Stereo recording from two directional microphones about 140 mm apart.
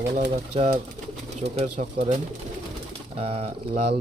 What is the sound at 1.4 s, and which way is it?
Speech, 50° right (ahead or behind).